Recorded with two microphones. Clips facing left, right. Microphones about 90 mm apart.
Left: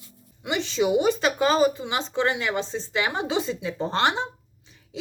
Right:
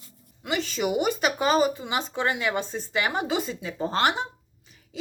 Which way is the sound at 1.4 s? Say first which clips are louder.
Left 2 dB; 15° right (ahead or behind).